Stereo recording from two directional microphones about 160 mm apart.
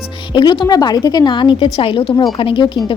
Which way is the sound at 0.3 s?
30° left (ahead or behind).